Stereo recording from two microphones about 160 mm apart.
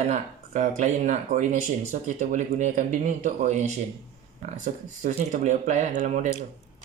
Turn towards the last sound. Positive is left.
turn(degrees=-50)  # may be behind; listen again after turning